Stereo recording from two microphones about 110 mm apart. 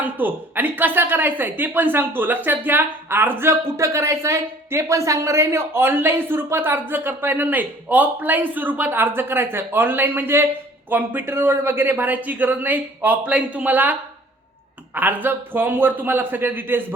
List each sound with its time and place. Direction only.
0.0 s a woman's voice: 15° right (ahead or behind)
14.9 s a man's voice: 15° right (ahead or behind)